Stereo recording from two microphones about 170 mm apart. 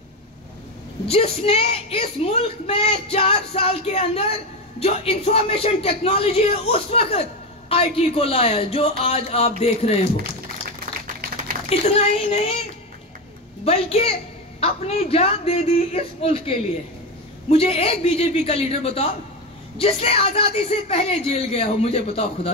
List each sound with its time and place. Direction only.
1.0 s speech: 35° left (ahead or behind)
11.7 s speech: 35° left (ahead or behind)
13.7 s speech: 35° left (ahead or behind)